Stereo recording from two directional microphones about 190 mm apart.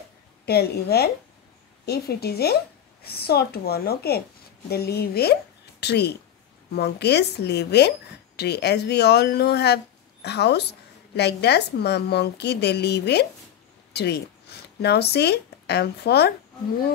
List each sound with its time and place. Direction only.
0.5 s a woman's voice: 55° left (ahead or behind)